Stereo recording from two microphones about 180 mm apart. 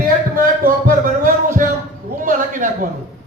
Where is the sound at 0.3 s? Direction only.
50° right (ahead or behind).